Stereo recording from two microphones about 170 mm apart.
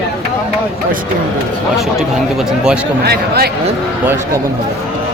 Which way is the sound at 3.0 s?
70° right (ahead or behind).